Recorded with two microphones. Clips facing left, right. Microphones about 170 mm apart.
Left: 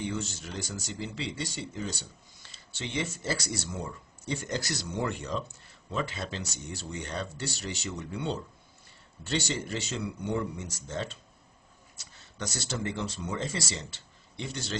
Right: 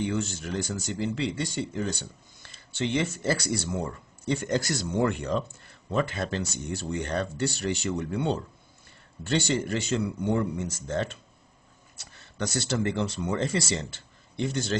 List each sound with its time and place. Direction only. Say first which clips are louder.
0.1 s speech: right 6 dB; 55° right (ahead or behind)